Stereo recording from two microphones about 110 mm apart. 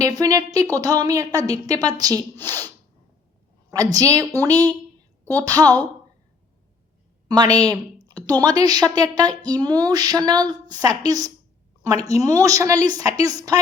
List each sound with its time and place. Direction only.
0.2 s speech: 35° right (ahead or behind)
2.3 s speech: 20° left (ahead or behind)
3.7 s speech: 35° right (ahead or behind)
7.3 s speech: 35° right (ahead or behind)